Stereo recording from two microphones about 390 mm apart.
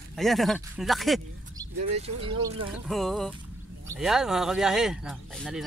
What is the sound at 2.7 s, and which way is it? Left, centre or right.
Speech, centre.